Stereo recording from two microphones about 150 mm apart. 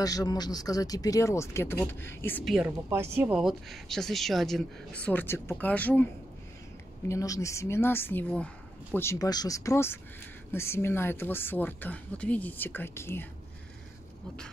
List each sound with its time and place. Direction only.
0.0 s speech: 25° left (ahead or behind)
2.4 s speech: 5° right (ahead or behind)
2.9 s speech: 15° right (ahead or behind)
3.3 s speech: centre (ahead or behind)
7.1 s a woman's voice: 20° left (ahead or behind)